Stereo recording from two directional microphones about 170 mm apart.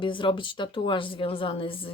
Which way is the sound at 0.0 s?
30° left (ahead or behind).